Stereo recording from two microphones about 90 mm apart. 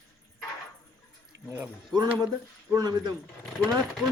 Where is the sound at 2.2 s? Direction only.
45° right (ahead or behind).